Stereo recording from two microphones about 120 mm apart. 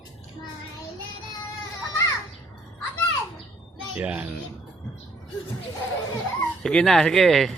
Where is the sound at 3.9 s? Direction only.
10° right (ahead or behind).